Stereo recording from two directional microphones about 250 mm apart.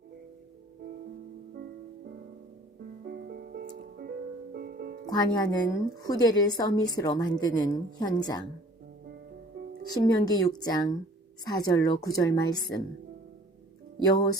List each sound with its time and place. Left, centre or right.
3.0 s music: right
5.0 s a woman's voice: centre
9.9 s a woman's voice: centre